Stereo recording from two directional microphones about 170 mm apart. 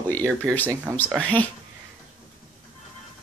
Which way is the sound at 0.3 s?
10° right (ahead or behind).